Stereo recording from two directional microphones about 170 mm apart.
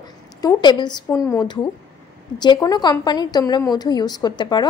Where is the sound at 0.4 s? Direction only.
25° left (ahead or behind).